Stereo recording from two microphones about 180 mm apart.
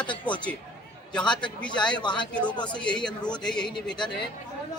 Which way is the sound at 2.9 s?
5° left (ahead or behind).